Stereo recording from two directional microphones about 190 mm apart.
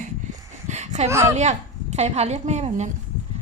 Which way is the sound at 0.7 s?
35° right (ahead or behind).